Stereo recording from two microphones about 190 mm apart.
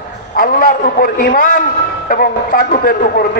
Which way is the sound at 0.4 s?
50° left (ahead or behind).